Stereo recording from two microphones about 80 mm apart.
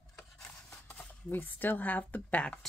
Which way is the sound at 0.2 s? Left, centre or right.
Centre.